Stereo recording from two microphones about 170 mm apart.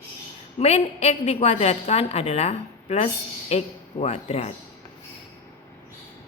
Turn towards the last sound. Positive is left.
turn(degrees=40)  # may be behind; listen again after turning